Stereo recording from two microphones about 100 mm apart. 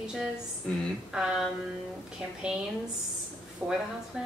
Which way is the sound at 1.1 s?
5° right (ahead or behind).